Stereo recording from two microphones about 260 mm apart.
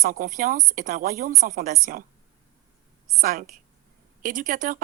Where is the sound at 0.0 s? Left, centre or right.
Right.